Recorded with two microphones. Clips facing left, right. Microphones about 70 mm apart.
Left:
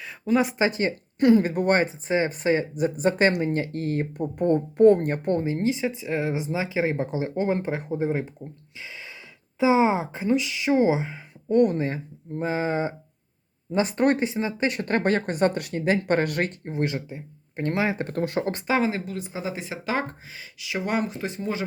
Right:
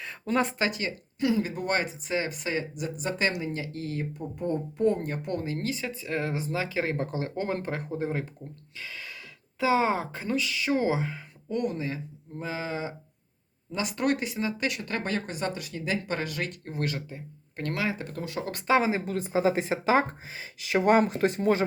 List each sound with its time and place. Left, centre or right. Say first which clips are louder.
0.0 s a sound: left 4 dB; centre
0.6 s speech: left 6 dB; left
1.2 s speech: left 8 dB; left
5.4 s speech: left 7 dB; left
8.8 s gasp: even; centre
9.6 s speech: left 4 dB; centre
11.4 s speech: left 9 dB; left
14.8 s speech: left 8 dB; left
16.6 s speech: left 5 dB; left
17.9 s speech: left 8 dB; left
18.7 s speech: right 1 dB; centre
19.0 s speech: right 6 dB; right
19.8 s speech: right 3 dB; right
20.6 s speech: right 5 dB; right